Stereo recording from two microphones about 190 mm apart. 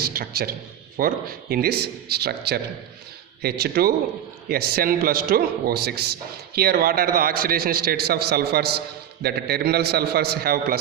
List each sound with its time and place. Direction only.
0.0 s a man's voice: 50° right (ahead or behind)